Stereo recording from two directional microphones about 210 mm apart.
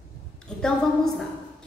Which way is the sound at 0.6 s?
5° left (ahead or behind).